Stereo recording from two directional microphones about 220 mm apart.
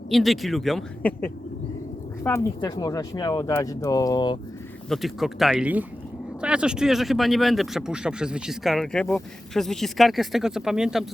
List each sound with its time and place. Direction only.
0.1 s speech: centre (ahead or behind)
2.2 s speech: 15° left (ahead or behind)
4.9 s speech: centre (ahead or behind)